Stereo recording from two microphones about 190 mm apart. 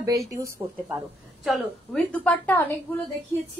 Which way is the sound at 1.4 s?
5° left (ahead or behind).